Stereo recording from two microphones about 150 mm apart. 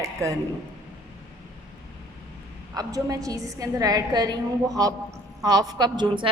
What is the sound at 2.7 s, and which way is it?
A woman's voice, 25° right (ahead or behind).